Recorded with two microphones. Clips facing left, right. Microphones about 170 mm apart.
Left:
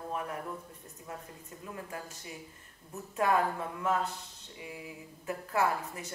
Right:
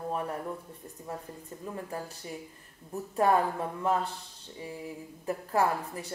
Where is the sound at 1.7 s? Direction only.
35° right (ahead or behind).